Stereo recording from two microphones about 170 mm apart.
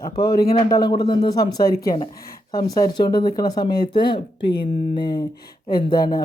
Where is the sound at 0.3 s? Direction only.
20° left (ahead or behind).